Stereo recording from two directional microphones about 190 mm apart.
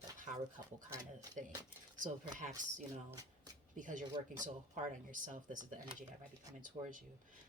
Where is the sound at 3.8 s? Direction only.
45° right (ahead or behind).